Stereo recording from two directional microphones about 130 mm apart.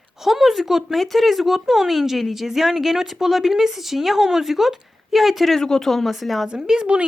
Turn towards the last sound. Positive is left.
turn(degrees=-5)  # may be behind; listen again after turning